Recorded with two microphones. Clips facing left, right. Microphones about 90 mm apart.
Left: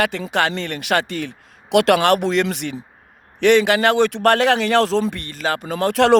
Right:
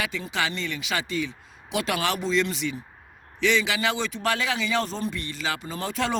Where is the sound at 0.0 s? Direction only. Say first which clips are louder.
Left 9 dB; 60° left (ahead or behind); by 5.2 s 85° left.